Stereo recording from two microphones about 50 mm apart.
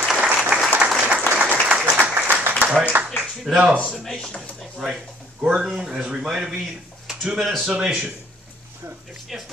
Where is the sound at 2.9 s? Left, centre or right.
Right.